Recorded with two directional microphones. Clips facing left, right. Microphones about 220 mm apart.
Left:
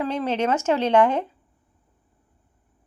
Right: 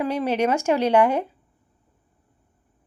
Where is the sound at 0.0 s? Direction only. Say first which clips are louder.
Right 2 dB; 10° right (ahead or behind).